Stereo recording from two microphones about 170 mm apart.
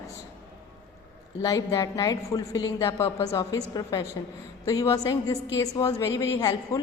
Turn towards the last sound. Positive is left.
turn(degrees=20)  # may be behind; listen again after turning